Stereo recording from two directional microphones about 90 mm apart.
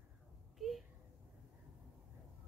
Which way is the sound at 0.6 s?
Centre (ahead or behind).